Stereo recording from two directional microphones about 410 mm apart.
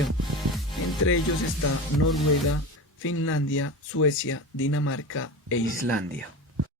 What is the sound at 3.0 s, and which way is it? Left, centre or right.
Speech, left.